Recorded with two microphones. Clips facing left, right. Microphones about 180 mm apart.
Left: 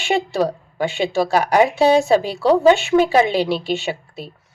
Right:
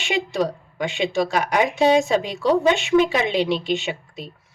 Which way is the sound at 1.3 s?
35° left (ahead or behind).